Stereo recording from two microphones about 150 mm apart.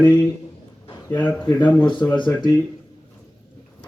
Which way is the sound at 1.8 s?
30° left (ahead or behind).